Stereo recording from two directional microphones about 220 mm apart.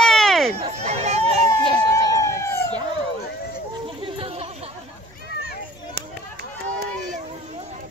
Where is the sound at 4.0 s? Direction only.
25° right (ahead or behind).